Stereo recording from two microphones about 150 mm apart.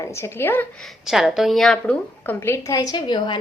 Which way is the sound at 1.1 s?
Centre (ahead or behind).